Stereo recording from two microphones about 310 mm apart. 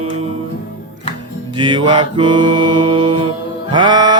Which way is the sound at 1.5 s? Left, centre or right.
Centre.